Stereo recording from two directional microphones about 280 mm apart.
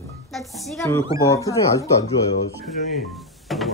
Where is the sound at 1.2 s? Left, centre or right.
Centre.